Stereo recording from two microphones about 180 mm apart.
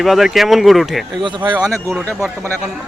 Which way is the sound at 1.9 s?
5° left (ahead or behind).